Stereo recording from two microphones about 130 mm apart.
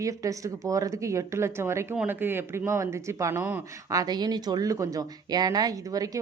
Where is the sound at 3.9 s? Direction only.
30° right (ahead or behind).